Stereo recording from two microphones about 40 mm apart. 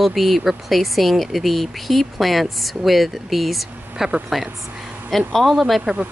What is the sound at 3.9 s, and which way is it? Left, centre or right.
Speech, centre.